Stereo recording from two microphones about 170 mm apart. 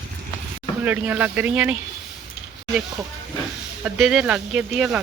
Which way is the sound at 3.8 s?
Centre (ahead or behind).